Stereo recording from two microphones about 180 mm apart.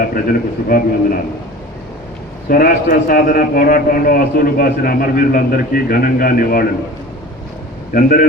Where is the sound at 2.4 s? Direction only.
55° left (ahead or behind).